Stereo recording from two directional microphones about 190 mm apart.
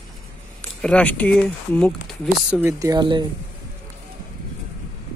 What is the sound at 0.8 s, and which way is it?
Speech, 5° left (ahead or behind).